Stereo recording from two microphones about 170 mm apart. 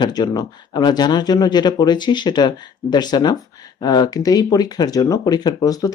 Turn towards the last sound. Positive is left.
turn(degrees=20)  # may be behind; listen again after turning